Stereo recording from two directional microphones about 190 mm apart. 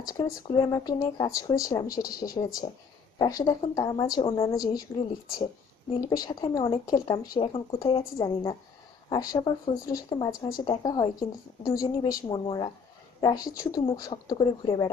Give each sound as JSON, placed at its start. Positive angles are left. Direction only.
{"t": 0.0, "sound": "speech", "side_deg": 20}
{"t": 6.0, "sound": "speech", "side_deg": 20}